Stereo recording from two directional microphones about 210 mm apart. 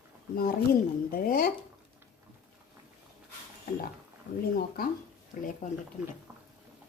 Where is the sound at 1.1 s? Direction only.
45° left (ahead or behind).